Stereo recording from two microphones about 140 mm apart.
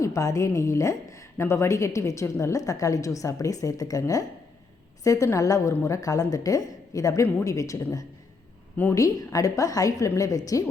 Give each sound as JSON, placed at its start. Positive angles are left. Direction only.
{"t": 0.0, "sound": "a woman's voice", "side_deg": 25}